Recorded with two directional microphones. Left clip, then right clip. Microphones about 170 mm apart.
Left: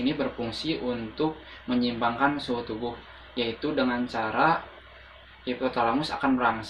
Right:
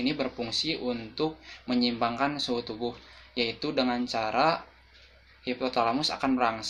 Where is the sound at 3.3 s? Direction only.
15° right (ahead or behind).